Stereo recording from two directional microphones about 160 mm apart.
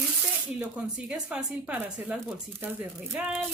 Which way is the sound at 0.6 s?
10° right (ahead or behind).